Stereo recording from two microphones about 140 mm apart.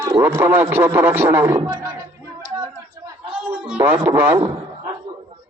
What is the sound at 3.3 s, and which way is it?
Speech, 10° right (ahead or behind).